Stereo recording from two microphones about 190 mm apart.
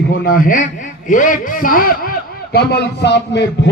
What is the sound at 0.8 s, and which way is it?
A man's voice, 45° left (ahead or behind).